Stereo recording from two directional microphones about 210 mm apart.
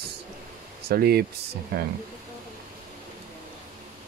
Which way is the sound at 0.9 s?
45° right (ahead or behind).